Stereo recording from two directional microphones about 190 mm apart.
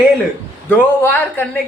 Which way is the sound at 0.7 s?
10° left (ahead or behind).